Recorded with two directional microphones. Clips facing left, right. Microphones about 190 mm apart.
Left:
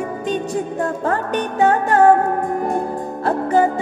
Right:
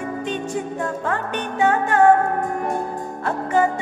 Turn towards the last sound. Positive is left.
turn(degrees=35)  # may be behind; listen again after turning